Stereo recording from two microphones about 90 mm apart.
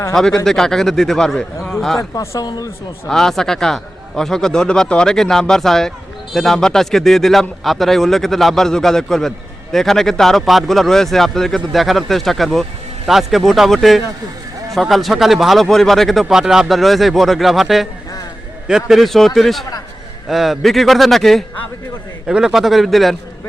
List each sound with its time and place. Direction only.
0.1 s speech: 5° left (ahead or behind)
2.0 s speech: 40° left (ahead or behind)
3.1 s speech: 5° left (ahead or behind)